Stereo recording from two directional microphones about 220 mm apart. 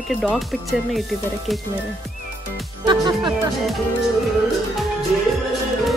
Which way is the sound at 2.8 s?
20° right (ahead or behind).